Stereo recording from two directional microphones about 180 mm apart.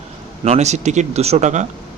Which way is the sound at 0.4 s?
40° right (ahead or behind).